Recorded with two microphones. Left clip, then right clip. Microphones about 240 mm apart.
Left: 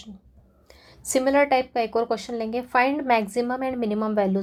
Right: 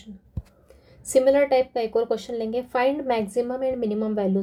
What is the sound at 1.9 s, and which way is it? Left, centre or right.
Speech, centre.